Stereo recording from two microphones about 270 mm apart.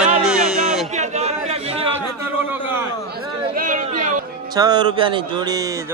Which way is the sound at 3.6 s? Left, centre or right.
Right.